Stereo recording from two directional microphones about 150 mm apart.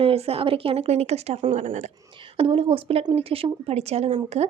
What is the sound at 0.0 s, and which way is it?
Speech, 40° right (ahead or behind).